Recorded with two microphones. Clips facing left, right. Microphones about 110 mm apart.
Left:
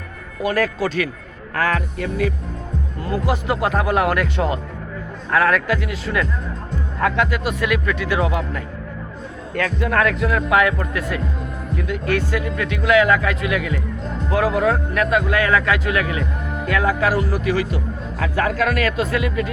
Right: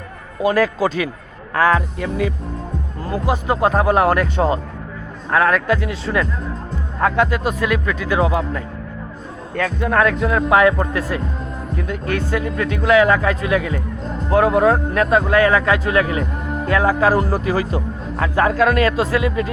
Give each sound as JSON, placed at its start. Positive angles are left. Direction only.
{"t": 0.4, "sound": "speech", "side_deg": -20}
{"t": 3.0, "sound": "speech", "side_deg": -35}
{"t": 9.6, "sound": "speech", "side_deg": -25}
{"t": 12.4, "sound": "speech", "side_deg": -35}